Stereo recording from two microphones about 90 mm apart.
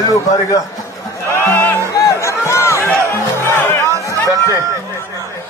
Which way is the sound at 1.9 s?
35° left (ahead or behind).